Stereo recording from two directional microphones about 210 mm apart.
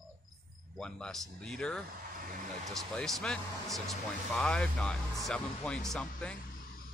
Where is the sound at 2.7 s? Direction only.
Centre (ahead or behind).